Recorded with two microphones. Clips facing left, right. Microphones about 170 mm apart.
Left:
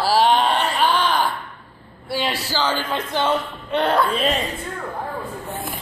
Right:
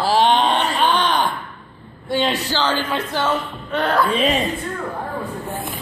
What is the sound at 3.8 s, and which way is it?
Speech, 25° left (ahead or behind).